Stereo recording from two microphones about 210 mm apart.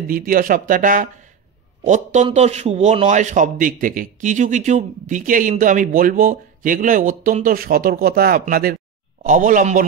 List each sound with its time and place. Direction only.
0.1 s a man's voice: 40° right (ahead or behind)